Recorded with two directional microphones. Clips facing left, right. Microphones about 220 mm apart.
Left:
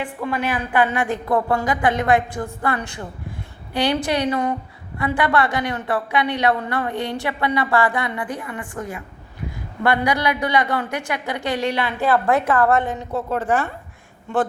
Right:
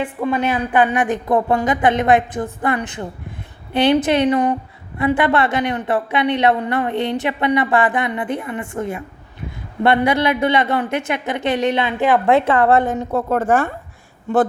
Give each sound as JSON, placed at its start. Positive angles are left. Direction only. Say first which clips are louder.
{"t": 0.3, "sound": "a woman's voice", "louder": "right 4 dB", "side_deg": -20}
{"t": 12.8, "sound": "a woman's voice", "louder": "right 5 dB", "side_deg": -45}